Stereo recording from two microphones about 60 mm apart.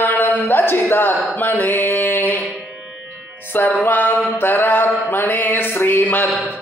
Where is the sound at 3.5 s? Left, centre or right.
Left.